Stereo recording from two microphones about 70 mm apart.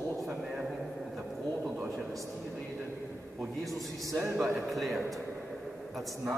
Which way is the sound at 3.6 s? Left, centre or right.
Centre.